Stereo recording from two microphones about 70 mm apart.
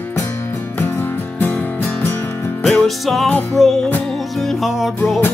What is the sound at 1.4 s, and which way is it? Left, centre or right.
Music, left.